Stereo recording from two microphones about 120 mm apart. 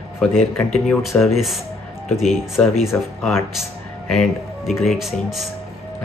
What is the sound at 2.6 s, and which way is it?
Speech, 10° left (ahead or behind).